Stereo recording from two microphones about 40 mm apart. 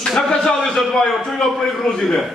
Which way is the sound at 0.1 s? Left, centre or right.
Centre.